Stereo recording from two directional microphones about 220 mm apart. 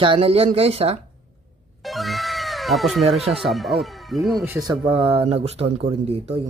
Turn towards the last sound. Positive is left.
turn(degrees=-25)  # may be behind; listen again after turning